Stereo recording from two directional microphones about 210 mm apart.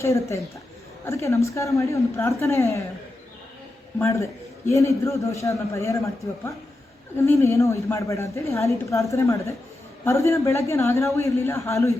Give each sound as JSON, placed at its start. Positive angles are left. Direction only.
{"t": 0.0, "sound": "a woman's voice", "side_deg": 15}
{"t": 3.9, "sound": "a woman's voice", "side_deg": 15}